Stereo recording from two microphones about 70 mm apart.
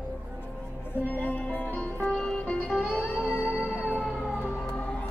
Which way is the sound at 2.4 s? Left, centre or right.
Left.